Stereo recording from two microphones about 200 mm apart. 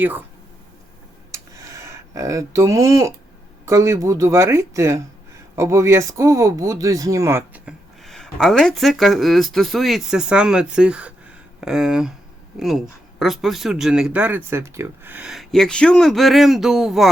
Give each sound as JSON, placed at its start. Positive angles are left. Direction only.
{"t": 0.0, "sound": "speech", "side_deg": -10}
{"t": 1.3, "sound": "a sound", "side_deg": -15}
{"t": 3.7, "sound": "speech", "side_deg": -15}